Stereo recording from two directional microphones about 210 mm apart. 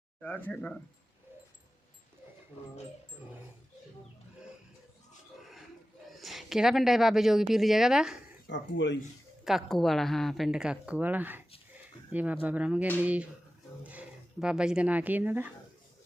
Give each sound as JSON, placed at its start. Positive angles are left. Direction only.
{"t": 0.2, "sound": "speech", "side_deg": 10}
{"t": 6.1, "sound": "speech", "side_deg": 0}
{"t": 8.4, "sound": "speech", "side_deg": 60}
{"t": 9.4, "sound": "speech", "side_deg": 0}